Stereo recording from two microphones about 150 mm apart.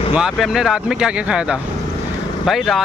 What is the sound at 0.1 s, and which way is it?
Speech, centre (ahead or behind).